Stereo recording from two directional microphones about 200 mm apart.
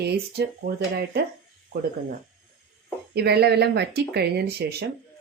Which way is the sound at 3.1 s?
55° right (ahead or behind).